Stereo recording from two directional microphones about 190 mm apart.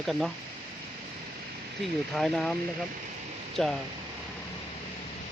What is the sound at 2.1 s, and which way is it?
Speech, centre (ahead or behind).